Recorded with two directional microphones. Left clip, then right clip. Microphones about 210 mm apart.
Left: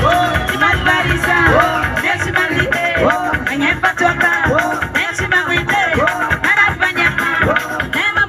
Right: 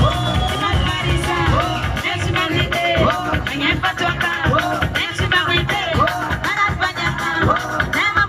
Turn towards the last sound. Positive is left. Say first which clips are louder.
# left 6 dB
turn(degrees=35)  # may be behind; listen again after turning